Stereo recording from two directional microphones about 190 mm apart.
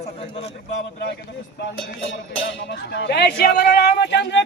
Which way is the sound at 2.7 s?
65° left (ahead or behind).